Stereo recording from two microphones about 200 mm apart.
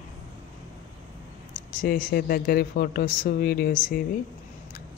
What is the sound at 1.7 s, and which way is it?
Speech, 45° left (ahead or behind).